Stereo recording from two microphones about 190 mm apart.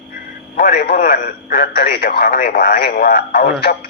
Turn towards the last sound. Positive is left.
turn(degrees=55)  # may be behind; listen again after turning